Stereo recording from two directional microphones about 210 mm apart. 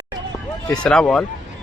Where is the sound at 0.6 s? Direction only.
5° left (ahead or behind).